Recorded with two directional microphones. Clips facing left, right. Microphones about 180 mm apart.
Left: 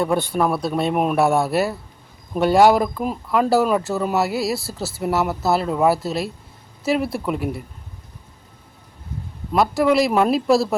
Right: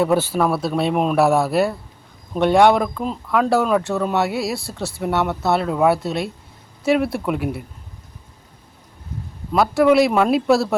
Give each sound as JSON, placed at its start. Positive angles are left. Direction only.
{"t": 0.0, "sound": "speech", "side_deg": -5}
{"t": 9.5, "sound": "speech", "side_deg": 0}